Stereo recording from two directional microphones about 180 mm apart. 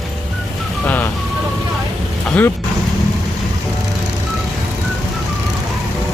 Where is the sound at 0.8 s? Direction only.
10° left (ahead or behind).